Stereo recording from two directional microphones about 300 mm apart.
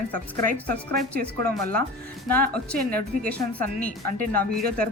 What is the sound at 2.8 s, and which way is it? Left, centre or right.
A woman's voice, right.